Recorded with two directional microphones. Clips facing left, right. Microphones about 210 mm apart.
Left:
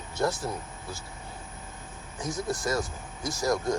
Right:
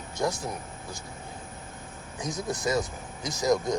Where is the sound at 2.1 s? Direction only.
20° right (ahead or behind).